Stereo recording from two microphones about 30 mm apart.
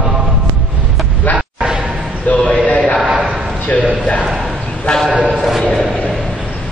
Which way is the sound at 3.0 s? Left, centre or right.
Right.